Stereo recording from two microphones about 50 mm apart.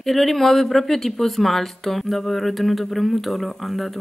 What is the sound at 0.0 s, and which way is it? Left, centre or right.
Speech, centre.